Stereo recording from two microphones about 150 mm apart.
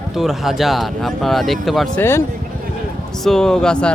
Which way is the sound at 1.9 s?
15° left (ahead or behind).